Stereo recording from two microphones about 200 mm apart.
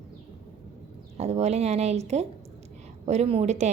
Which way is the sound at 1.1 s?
30° right (ahead or behind).